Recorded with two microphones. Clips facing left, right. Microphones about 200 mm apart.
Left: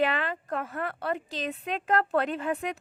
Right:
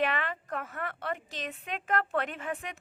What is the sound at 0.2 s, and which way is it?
A woman's voice, 35° left (ahead or behind).